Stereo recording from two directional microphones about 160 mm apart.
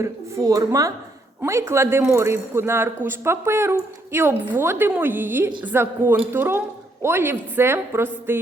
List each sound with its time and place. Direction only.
0.0 s a woman's voice: 20° right (ahead or behind)